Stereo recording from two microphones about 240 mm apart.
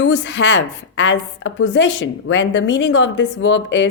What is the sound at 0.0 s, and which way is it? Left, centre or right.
A woman's voice, left.